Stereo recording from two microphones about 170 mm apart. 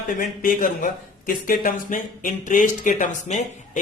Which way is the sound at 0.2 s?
55° left (ahead or behind).